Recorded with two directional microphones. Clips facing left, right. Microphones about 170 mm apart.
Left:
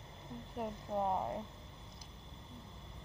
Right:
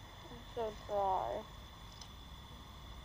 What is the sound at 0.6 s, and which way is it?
Speech, 10° left (ahead or behind).